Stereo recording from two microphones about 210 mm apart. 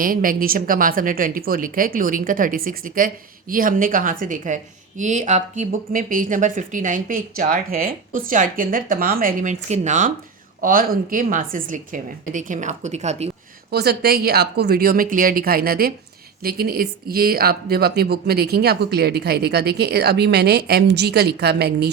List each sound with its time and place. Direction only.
0.0 s speech: 40° right (ahead or behind)
13.7 s speech: 50° right (ahead or behind)